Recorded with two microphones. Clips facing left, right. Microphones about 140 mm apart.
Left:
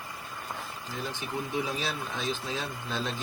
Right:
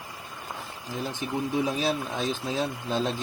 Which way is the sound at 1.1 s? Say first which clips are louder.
Right 6 dB; 40° right (ahead or behind).